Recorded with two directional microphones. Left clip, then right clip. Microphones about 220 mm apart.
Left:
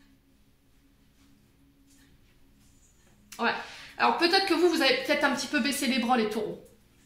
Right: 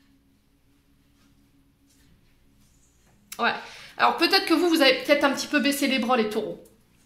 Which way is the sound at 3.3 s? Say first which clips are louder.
Right 5 dB; 50° right (ahead or behind).